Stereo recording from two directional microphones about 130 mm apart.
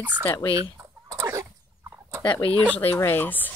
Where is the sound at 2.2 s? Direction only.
40° left (ahead or behind).